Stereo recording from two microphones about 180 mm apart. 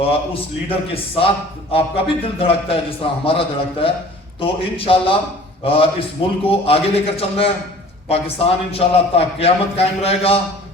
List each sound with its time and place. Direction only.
0.7 s a man's voice: 30° left (ahead or behind)